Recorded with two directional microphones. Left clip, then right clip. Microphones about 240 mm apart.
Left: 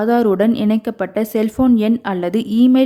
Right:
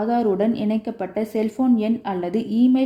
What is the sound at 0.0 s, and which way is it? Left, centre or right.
Speech, left.